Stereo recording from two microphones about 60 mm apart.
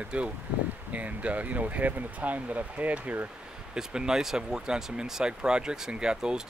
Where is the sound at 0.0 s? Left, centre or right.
Centre.